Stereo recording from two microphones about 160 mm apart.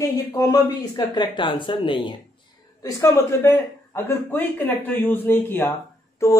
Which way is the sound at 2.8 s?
20° left (ahead or behind).